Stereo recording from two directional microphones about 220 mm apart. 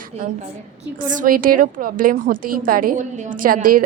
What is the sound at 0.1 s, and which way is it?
A woman's voice, 30° right (ahead or behind).